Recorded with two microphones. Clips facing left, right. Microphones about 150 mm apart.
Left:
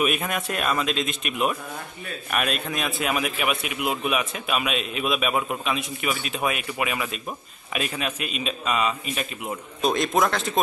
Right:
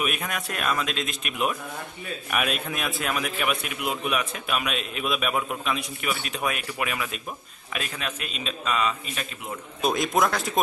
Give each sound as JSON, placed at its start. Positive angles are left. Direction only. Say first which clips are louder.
{"t": 0.0, "sound": "a man's voice", "louder": "left 4 dB", "side_deg": 0}
{"t": 9.8, "sound": "a man's voice", "louder": "left 1 dB", "side_deg": 0}